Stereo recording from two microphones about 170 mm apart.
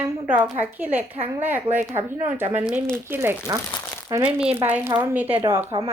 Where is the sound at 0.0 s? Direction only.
10° right (ahead or behind).